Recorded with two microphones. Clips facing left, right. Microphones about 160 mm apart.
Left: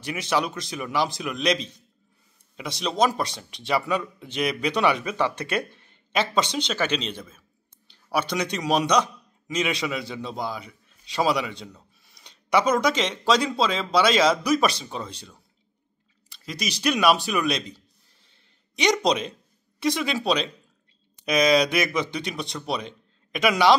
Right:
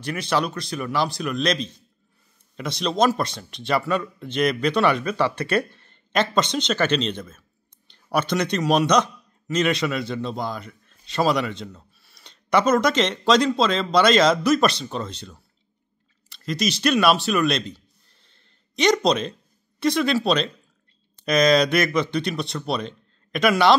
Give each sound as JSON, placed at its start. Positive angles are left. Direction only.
{"t": 0.0, "sound": "a man's voice", "side_deg": 15}